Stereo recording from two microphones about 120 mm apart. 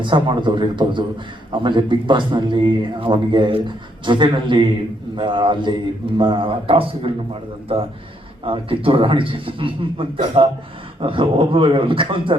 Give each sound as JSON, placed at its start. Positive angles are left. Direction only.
{"t": 0.0, "sound": "a man's voice", "side_deg": -40}
{"t": 8.4, "sound": "a man's voice", "side_deg": -45}